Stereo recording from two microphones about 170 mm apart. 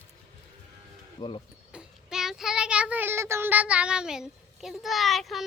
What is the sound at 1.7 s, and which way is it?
Child singing, 5° right (ahead or behind).